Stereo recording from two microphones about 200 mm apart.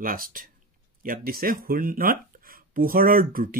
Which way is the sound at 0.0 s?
45° right (ahead or behind).